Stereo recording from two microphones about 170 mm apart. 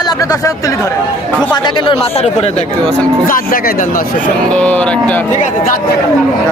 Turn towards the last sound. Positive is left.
turn(degrees=5)  # may be behind; listen again after turning